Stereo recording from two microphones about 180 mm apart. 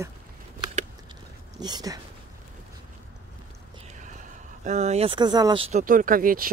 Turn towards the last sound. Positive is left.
turn(degrees=-50)  # may be behind; listen again after turning